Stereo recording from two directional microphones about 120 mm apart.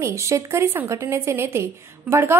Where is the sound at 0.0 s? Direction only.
25° right (ahead or behind).